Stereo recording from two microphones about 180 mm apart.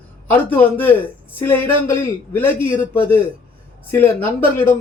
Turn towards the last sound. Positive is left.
turn(degrees=10)  # may be behind; listen again after turning